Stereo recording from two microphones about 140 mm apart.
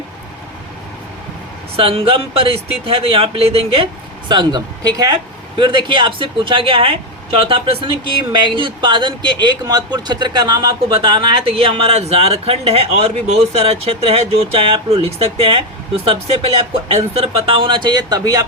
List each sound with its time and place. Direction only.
1.7 s speech: 40° right (ahead or behind)
4.3 s speech: 30° right (ahead or behind)